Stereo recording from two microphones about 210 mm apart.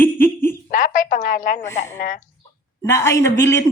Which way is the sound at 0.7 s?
40° left (ahead or behind).